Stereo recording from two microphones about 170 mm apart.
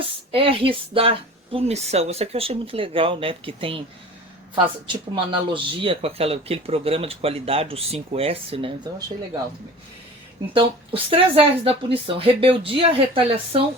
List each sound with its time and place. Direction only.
0.0 s speech: 35° right (ahead or behind)
10.5 s speech: 30° right (ahead or behind)